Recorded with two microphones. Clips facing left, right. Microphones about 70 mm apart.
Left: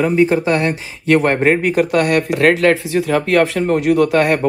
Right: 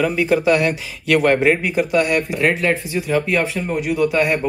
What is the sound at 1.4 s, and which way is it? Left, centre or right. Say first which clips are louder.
Speech: left 3 dB; left.